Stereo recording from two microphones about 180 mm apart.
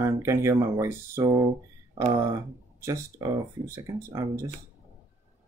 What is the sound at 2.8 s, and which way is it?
Speech, 20° right (ahead or behind).